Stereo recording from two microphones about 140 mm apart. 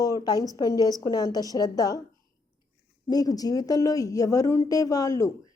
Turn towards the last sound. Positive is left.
turn(degrees=25)  # may be behind; listen again after turning